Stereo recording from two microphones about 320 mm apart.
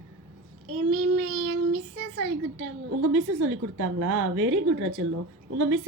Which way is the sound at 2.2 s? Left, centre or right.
Right.